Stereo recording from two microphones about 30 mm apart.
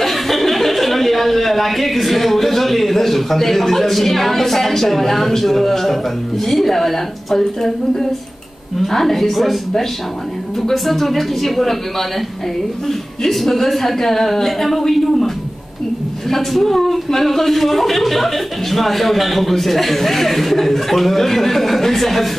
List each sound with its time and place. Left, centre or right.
0.0 s speech: centre
10.7 s speech: centre